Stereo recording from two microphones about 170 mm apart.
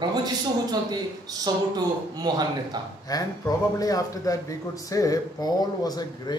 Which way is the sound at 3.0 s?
20° left (ahead or behind).